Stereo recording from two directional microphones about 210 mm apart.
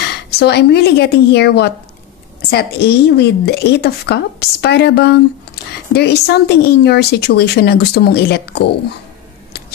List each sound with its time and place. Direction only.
0.3 s speech: 50° left (ahead or behind)